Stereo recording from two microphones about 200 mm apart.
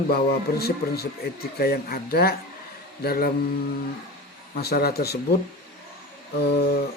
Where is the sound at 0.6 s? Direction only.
50° left (ahead or behind).